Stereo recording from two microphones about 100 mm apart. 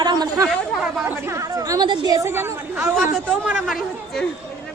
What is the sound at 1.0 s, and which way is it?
A woman's voice, 25° right (ahead or behind).